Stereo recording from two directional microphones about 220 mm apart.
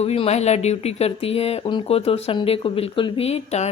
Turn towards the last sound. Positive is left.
turn(degrees=30)  # may be behind; listen again after turning